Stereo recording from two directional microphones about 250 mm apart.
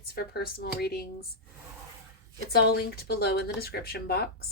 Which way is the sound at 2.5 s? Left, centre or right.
Left.